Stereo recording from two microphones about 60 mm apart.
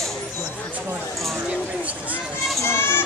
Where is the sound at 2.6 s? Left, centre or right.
Left.